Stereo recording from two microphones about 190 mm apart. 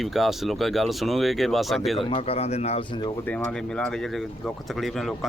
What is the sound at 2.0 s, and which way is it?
Speech, 30° left (ahead or behind).